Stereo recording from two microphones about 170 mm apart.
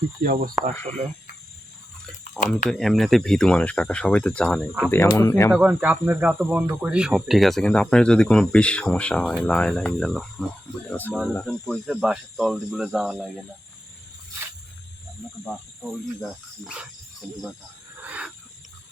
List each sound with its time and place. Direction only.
0.2 s speech: 55° right (ahead or behind)
0.6 s speech: 45° right (ahead or behind)
2.6 s speech: centre (ahead or behind)
4.9 s speech: 20° left (ahead or behind)
5.5 s speech: 10° right (ahead or behind); by 11.2 s 10° left (ahead or behind)
11.6 s speech: centre (ahead or behind)
15.8 s speech: 5° right (ahead or behind)
18.0 s a sound: 10° right (ahead or behind)